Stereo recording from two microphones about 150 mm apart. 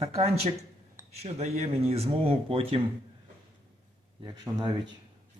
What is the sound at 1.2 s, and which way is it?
Speech, 45° right (ahead or behind).